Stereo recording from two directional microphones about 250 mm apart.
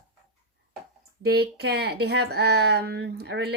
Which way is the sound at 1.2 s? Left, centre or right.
Right.